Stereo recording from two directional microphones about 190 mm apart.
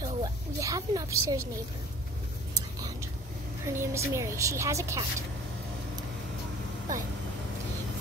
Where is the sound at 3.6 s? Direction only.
15° right (ahead or behind).